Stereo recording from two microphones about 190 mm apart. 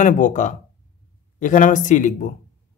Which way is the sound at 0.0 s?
40° left (ahead or behind).